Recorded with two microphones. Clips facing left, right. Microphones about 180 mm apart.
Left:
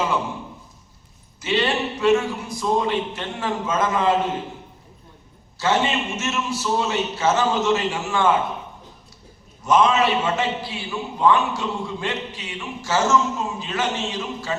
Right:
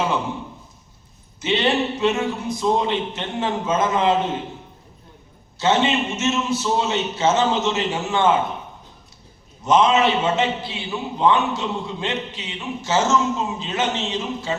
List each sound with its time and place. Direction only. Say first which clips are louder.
1.4 s a man's voice: right 2 dB; 20° right (ahead or behind)
5.5 s a man's voice: right 2 dB; 20° right (ahead or behind)
9.6 s a man's voice: right 1 dB; 20° right (ahead or behind)